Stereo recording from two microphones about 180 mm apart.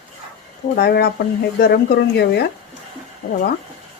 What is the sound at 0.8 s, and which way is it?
Speech, 60° left (ahead or behind).